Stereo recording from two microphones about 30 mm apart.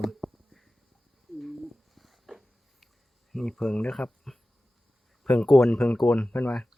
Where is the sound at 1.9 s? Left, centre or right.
Centre.